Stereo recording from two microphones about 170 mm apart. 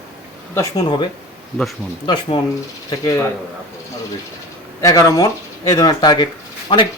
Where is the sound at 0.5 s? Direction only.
20° left (ahead or behind).